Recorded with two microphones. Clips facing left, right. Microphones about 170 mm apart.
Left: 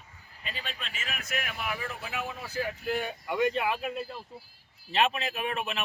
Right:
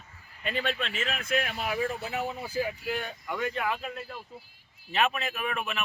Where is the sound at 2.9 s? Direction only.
5° left (ahead or behind).